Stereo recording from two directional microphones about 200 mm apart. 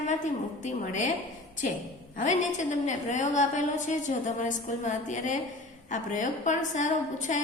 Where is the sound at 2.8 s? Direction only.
35° left (ahead or behind).